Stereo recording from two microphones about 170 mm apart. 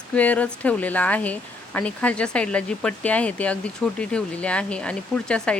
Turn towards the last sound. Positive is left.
turn(degrees=5)  # may be behind; listen again after turning